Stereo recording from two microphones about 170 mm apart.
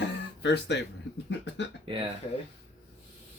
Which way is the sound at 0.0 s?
90° left.